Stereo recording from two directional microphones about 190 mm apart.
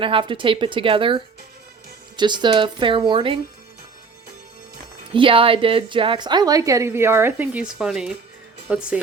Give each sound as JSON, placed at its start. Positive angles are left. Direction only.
{"t": 0.0, "sound": "a woman's voice", "side_deg": -25}
{"t": 5.1, "sound": "a woman's voice", "side_deg": -25}